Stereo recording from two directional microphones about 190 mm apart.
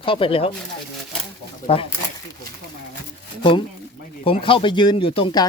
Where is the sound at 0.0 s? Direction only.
30° left (ahead or behind).